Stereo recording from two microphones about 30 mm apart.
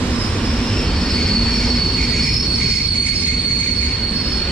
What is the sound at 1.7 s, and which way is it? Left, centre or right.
Train wheels squealing, centre.